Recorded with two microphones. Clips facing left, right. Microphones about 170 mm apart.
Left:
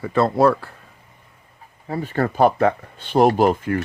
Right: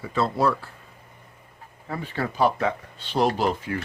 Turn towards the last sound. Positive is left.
turn(degrees=50)  # may be behind; listen again after turning